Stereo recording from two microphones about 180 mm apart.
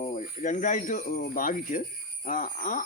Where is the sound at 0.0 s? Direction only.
45° left (ahead or behind).